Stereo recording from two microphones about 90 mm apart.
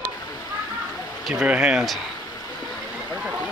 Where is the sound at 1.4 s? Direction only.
15° right (ahead or behind).